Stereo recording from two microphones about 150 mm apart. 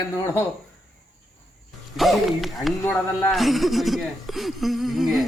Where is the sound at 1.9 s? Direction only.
Centre (ahead or behind).